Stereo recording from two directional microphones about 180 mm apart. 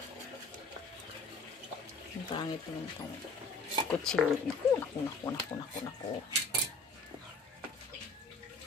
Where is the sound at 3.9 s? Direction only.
5° left (ahead or behind).